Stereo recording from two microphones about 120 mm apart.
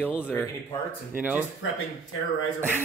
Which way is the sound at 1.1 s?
15° right (ahead or behind).